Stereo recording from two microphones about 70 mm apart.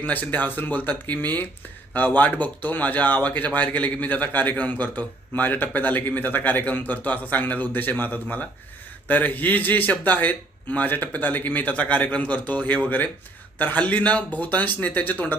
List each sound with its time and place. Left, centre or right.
0.0 s speech: left